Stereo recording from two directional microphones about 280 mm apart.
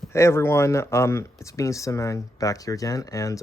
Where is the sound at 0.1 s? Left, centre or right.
Centre.